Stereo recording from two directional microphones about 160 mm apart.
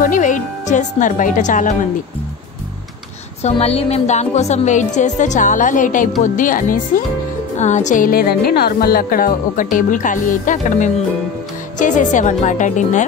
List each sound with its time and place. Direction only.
0.0 s speech: 55° left (ahead or behind)
3.4 s speech: 40° left (ahead or behind)